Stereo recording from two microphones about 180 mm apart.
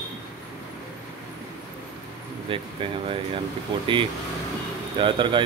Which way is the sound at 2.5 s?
30° right (ahead or behind).